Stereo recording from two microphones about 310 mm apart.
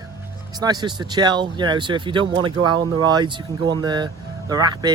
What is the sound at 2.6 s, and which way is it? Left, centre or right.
Speech, right.